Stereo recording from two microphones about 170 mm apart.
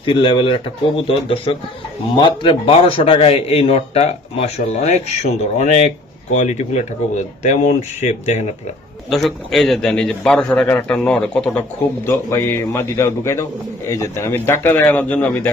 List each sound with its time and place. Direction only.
0.0 s a man's voice: 30° left (ahead or behind)
9.1 s a man's voice: centre (ahead or behind)